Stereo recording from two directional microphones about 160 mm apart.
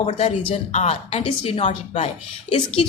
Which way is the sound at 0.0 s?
40° left (ahead or behind).